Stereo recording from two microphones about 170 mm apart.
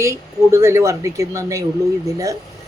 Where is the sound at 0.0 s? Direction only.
15° right (ahead or behind).